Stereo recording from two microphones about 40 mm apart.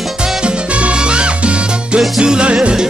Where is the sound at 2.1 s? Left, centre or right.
Right.